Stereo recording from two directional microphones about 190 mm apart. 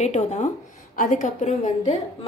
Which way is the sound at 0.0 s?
35° left (ahead or behind).